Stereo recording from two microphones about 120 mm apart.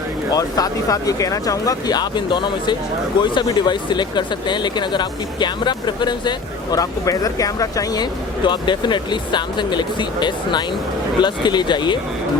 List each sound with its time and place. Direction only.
0.3 s speech: 30° left (ahead or behind)